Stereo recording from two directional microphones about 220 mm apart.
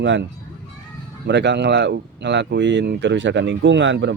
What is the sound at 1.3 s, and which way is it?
Speech, 50° right (ahead or behind).